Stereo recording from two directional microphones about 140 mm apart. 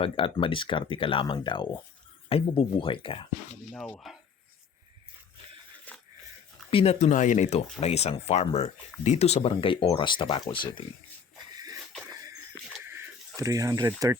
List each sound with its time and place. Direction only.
0.0 s speech: 40° left (ahead or behind)
4.1 s speech: centre (ahead or behind)
5.9 s a sound: 10° left (ahead or behind)
6.7 s speech: 45° left (ahead or behind)
7.1 s speech: 60° left (ahead or behind); by 10.8 s 35° left (ahead or behind)
12.0 s a sound: 25° right (ahead or behind)
12.8 s bird: 15° right (ahead or behind)